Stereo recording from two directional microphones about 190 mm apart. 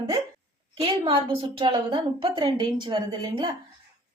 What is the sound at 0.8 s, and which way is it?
A woman's voice, 30° right (ahead or behind).